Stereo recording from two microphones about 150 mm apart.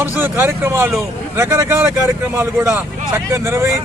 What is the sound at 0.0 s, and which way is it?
A man's voice, 15° right (ahead or behind).